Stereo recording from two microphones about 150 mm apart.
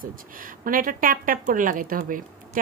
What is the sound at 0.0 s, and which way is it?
Speech, 70° right (ahead or behind).